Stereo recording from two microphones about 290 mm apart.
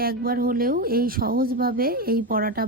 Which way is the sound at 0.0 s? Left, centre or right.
Right.